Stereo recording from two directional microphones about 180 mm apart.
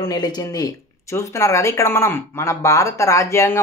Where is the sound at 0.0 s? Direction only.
20° left (ahead or behind).